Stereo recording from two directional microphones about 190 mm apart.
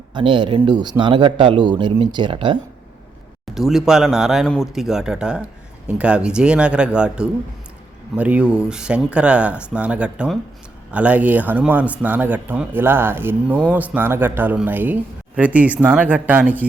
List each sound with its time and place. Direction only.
0.1 s speech: 25° right (ahead or behind)
3.5 s speech: centre (ahead or behind)